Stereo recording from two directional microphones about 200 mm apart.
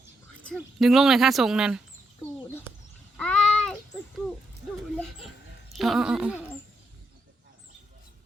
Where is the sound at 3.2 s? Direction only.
5° left (ahead or behind).